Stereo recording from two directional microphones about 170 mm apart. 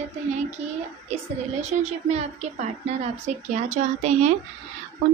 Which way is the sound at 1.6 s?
40° right (ahead or behind).